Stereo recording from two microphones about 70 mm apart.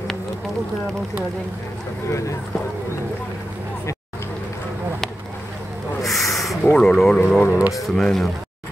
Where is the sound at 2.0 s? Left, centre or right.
Left.